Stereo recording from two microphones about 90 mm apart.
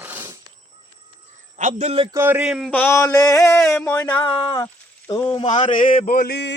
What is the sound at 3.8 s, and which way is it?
Male singing, 20° left (ahead or behind).